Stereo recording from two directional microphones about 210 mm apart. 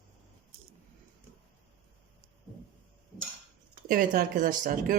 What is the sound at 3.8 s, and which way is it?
A woman's voice, 45° right (ahead or behind).